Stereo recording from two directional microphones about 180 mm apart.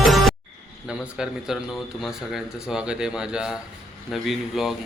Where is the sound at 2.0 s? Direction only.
Centre (ahead or behind).